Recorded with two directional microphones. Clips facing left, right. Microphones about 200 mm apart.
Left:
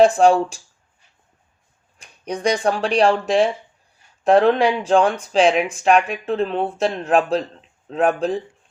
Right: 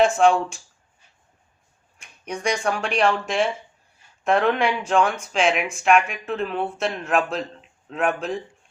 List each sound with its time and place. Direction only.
0.0 s speech: 35° left (ahead or behind)
2.0 s speech: 35° left (ahead or behind)